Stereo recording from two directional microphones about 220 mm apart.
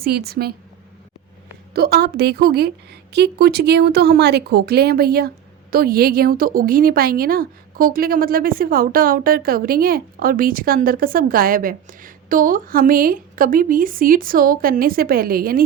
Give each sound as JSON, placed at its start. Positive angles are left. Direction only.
{"t": 0.0, "sound": "a woman's voice", "side_deg": -45}
{"t": 1.7, "sound": "a woman's voice", "side_deg": -45}